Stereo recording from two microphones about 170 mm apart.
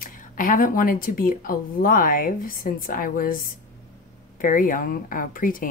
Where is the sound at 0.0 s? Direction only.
55° left (ahead or behind).